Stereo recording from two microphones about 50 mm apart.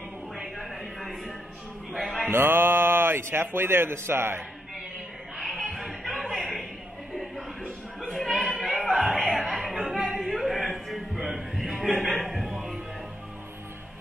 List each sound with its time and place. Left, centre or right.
0.4 s music: centre
1.9 s a man's voice: centre
2.3 s a man's voice: right
5.4 s a sound: centre
8.1 s a sound: centre
8.8 s music: centre